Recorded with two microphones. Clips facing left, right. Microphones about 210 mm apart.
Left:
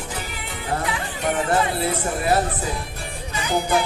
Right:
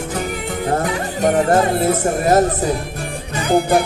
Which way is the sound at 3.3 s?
55° right (ahead or behind).